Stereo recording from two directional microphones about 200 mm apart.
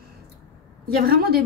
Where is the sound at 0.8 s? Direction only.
50° right (ahead or behind).